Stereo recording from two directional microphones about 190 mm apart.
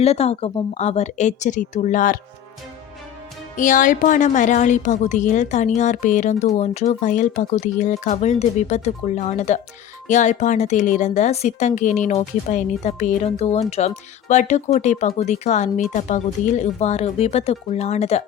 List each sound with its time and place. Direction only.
0.0 s a woman's voice: 35° left (ahead or behind)
3.6 s a woman's voice: 45° left (ahead or behind)